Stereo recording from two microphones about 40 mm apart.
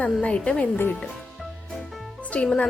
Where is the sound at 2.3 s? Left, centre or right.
Left.